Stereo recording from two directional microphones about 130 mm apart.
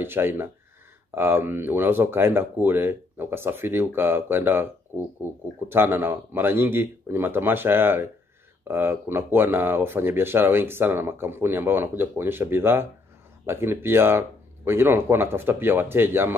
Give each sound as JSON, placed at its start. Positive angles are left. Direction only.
{"t": 0.0, "sound": "speech", "side_deg": -15}